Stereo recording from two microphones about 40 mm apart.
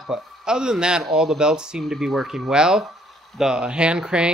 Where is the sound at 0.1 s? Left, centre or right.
Centre.